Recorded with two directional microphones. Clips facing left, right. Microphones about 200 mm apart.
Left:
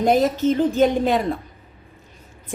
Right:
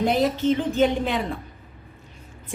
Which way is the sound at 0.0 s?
45° left (ahead or behind).